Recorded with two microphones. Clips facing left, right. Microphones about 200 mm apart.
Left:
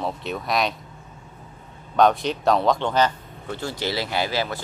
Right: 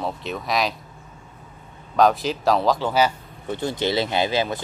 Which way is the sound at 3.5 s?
20° right (ahead or behind).